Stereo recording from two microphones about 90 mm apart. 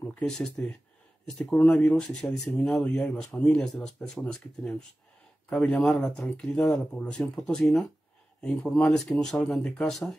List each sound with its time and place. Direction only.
0.1 s speech: 10° left (ahead or behind)
8.8 s speech: 5° left (ahead or behind)